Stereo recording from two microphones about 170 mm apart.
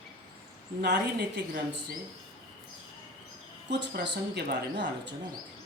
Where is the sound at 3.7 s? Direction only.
90° right.